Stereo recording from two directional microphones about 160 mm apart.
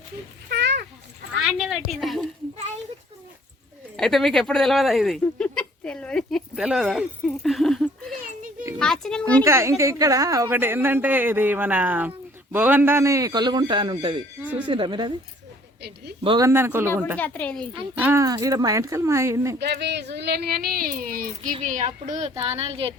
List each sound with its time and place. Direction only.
0.4 s children playing: 90° right
1.5 s a sound: centre (ahead or behind)
3.9 s speech: centre (ahead or behind)
5.2 s a sound: 5° left (ahead or behind)
9.4 s a woman's voice: 15° right (ahead or behind)
16.2 s speech: 30° right (ahead or behind)
16.5 s a woman's voice: 15° right (ahead or behind)
17.2 s speech: 10° left (ahead or behind)
17.9 s speech: 15° right (ahead or behind)
19.5 s speech: 90° right; by 21.5 s 65° right (ahead or behind)
21.6 s speech: 50° right (ahead or behind)